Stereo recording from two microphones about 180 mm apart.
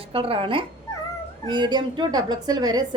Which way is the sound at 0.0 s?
30° right (ahead or behind).